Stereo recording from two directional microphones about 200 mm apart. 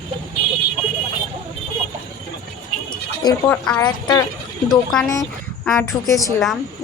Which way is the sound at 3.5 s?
10° left (ahead or behind).